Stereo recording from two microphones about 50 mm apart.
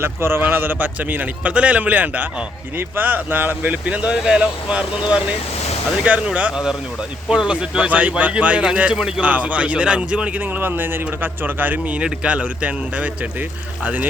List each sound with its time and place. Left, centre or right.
0.0 s speech: right
2.7 s speech: right
7.3 s speech: centre
9.0 s speech: centre
9.2 s speech: right
10.3 s speech: right
11.9 s speech: right